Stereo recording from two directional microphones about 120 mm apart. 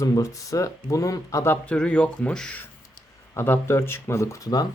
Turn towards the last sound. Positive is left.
turn(degrees=30)  # may be behind; listen again after turning